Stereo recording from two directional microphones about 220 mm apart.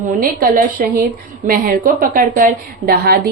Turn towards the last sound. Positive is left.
turn(degrees=-45)  # may be behind; listen again after turning